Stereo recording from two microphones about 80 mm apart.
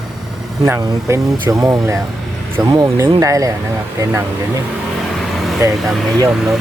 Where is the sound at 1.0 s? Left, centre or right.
Right.